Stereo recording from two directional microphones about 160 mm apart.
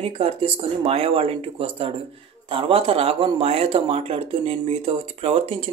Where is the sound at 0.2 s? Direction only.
40° right (ahead or behind).